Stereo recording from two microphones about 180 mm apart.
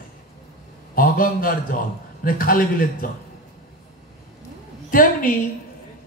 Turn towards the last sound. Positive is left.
turn(degrees=50)  # may be behind; listen again after turning